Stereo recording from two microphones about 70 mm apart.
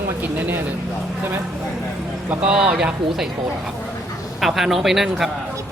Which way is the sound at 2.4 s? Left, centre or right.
Centre.